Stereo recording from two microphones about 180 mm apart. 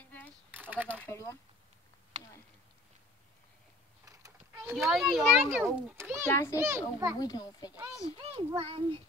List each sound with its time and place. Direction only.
0.0 s a sound: 10° left (ahead or behind)
0.5 s a sound: 10° right (ahead or behind)
0.9 s speech: 15° left (ahead or behind)
4.0 s mechanisms: 15° right (ahead or behind)
4.7 s a child's voice: centre (ahead or behind)
6.2 s speech: 15° left (ahead or behind)
6.5 s a child's voice: 15° right (ahead or behind)
7.2 s speech: 20° left (ahead or behind)
8.2 s a child's voice: 30° right (ahead or behind)